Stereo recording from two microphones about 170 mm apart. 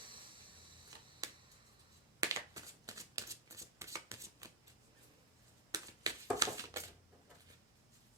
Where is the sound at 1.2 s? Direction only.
20° right (ahead or behind).